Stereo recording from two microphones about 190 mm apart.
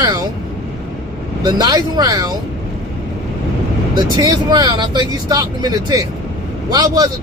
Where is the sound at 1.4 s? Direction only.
20° right (ahead or behind).